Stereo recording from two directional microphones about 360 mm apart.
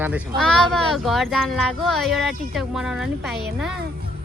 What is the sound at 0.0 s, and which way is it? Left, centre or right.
A woman's voice, centre.